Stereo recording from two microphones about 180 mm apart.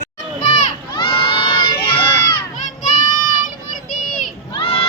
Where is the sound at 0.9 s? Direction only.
30° left (ahead or behind).